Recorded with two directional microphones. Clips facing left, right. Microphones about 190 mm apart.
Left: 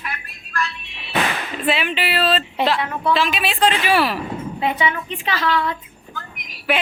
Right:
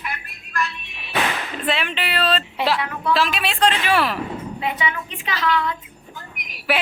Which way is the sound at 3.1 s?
Centre (ahead or behind).